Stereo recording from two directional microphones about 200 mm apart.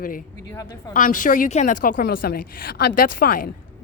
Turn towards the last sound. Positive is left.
turn(degrees=45)  # may be behind; listen again after turning